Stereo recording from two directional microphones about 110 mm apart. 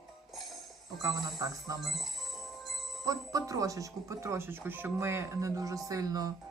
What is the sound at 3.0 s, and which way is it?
Speech, 30° right (ahead or behind).